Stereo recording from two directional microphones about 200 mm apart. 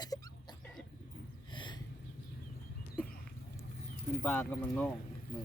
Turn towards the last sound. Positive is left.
turn(degrees=5)  # may be behind; listen again after turning